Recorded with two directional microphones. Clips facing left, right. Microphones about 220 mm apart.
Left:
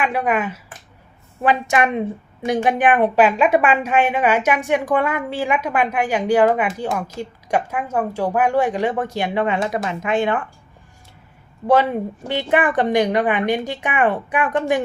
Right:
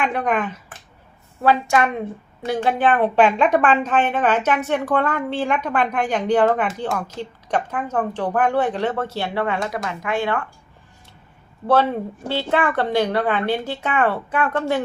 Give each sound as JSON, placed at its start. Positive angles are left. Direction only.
{"t": 0.0, "sound": "speech", "side_deg": 5}
{"t": 1.4, "sound": "a woman's voice", "side_deg": 20}
{"t": 11.7, "sound": "a woman's voice", "side_deg": 15}